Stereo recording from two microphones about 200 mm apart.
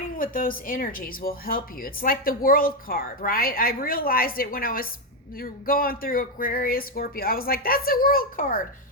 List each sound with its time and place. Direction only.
0.2 s speech: 45° left (ahead or behind)